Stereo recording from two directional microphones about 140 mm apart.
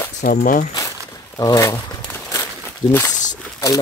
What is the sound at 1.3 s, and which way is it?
Speech, 25° left (ahead or behind).